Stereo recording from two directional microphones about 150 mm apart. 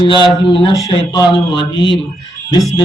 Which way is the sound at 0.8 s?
25° left (ahead or behind).